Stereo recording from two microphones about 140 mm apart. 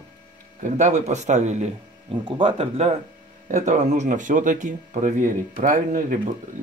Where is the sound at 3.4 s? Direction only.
60° right (ahead or behind).